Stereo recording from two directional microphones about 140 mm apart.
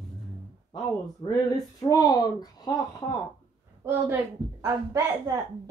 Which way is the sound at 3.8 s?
20° right (ahead or behind).